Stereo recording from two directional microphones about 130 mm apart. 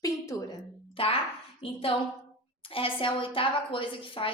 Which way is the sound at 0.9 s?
50° left (ahead or behind).